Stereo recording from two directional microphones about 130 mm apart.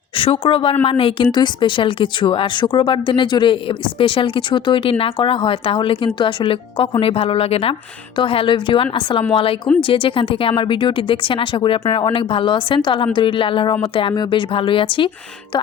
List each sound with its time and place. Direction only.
0.2 s a woman's voice: 45° left (ahead or behind)